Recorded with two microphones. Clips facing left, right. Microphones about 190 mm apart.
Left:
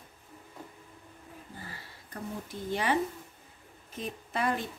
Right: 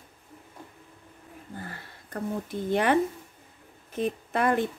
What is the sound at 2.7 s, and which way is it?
A woman's voice, 55° right (ahead or behind).